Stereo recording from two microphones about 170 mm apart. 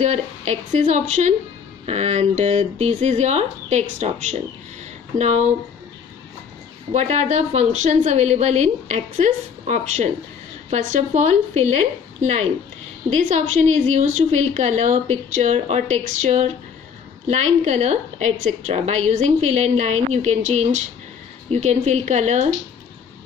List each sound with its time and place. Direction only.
0.0 s a woman's voice: 40° right (ahead or behind)
6.9 s a woman's voice: 40° right (ahead or behind)